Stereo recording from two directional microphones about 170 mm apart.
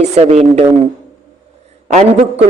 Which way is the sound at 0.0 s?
40° right (ahead or behind).